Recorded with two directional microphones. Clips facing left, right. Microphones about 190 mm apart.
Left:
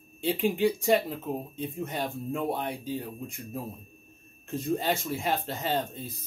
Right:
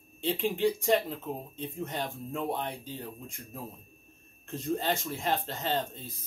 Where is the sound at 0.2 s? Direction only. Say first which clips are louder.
Left 3 dB; 10° left (ahead or behind).